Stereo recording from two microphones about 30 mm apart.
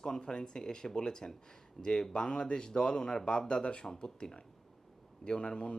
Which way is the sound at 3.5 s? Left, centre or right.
Left.